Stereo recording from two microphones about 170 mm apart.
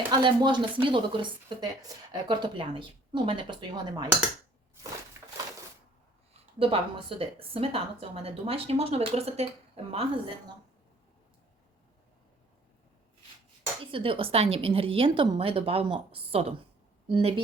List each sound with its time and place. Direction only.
0.2 s speech: 25° right (ahead or behind)
5.2 s crushing: 15° right (ahead or behind)
6.6 s a woman's voice: 30° right (ahead or behind)
13.9 s a woman's voice: 30° right (ahead or behind)